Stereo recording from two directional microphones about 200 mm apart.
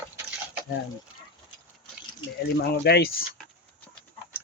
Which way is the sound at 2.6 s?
55° left (ahead or behind).